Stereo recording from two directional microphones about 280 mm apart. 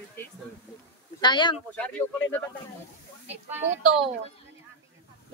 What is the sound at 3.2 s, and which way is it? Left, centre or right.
Speech, centre.